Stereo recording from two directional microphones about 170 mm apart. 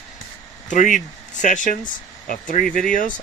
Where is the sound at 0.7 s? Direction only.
50° left (ahead or behind).